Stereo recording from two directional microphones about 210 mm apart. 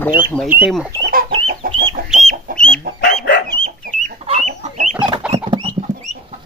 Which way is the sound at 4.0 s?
35° right (ahead or behind).